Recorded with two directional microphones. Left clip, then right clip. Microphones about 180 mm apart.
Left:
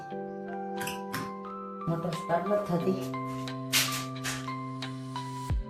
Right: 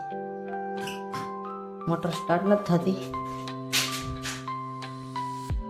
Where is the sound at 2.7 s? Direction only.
30° right (ahead or behind).